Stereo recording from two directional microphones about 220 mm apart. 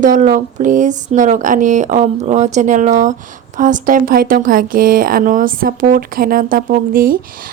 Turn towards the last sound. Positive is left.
turn(degrees=-40)  # may be behind; listen again after turning